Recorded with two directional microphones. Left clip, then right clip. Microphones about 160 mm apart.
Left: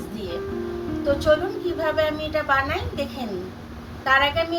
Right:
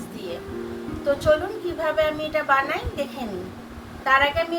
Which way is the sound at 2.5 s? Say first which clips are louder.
Right 1 dB; 15° right (ahead or behind).